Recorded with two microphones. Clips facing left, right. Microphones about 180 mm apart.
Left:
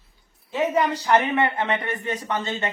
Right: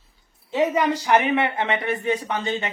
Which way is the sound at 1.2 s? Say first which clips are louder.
Right 1 dB; 10° right (ahead or behind).